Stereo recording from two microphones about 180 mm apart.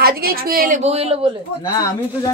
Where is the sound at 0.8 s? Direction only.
35° right (ahead or behind).